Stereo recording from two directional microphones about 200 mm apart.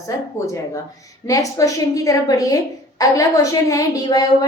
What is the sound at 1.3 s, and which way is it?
A woman's voice, 15° left (ahead or behind).